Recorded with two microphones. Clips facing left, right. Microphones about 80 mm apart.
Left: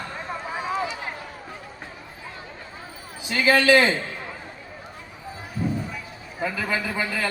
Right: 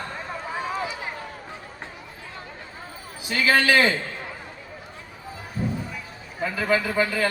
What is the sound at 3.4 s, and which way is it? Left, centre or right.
Speech, left.